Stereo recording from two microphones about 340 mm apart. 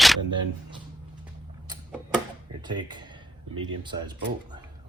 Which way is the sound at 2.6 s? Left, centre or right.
Centre.